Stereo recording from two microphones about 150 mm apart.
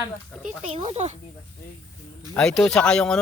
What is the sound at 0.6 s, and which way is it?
Speech, 40° right (ahead or behind).